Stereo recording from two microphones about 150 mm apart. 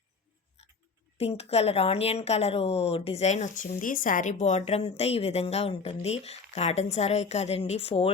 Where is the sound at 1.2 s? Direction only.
45° left (ahead or behind).